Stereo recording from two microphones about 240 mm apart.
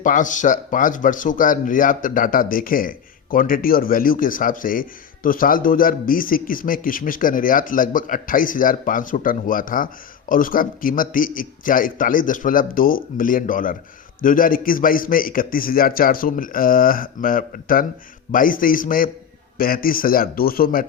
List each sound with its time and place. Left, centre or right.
0.0 s speech: left